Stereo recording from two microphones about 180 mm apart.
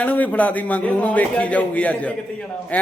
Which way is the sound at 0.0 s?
10° left (ahead or behind).